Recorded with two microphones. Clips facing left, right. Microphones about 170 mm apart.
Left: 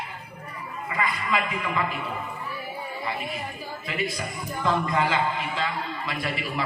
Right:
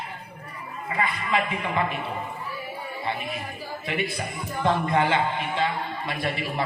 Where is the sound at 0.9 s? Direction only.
30° right (ahead or behind).